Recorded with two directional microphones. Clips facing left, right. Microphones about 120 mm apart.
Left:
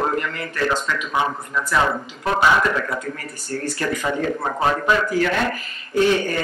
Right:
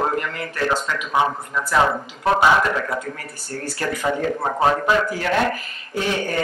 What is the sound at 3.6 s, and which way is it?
A man's voice, 10° right (ahead or behind).